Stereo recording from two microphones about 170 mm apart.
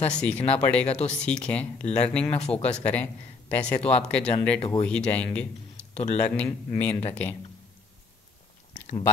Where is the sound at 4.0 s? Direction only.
5° left (ahead or behind).